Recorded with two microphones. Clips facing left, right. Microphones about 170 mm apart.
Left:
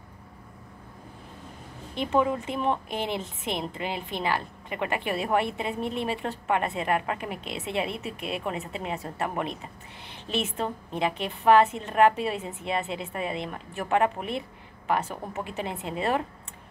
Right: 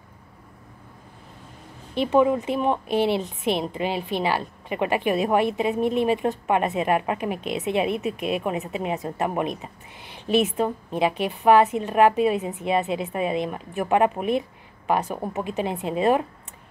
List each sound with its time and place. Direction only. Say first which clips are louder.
2.1 s a woman's voice: right 5 dB; 20° right (ahead or behind)